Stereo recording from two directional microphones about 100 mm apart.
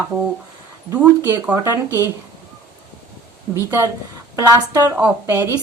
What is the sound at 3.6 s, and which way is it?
Speech, 30° right (ahead or behind).